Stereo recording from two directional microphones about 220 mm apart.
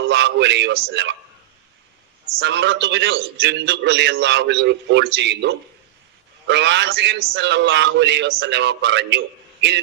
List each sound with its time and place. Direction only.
0.1 s a man's voice: 55° right (ahead or behind)
2.4 s a man's voice: 55° right (ahead or behind)